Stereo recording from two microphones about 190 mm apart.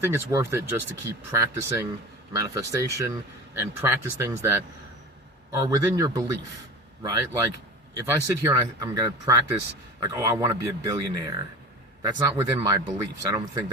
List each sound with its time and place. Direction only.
0.0 s speech: 15° right (ahead or behind)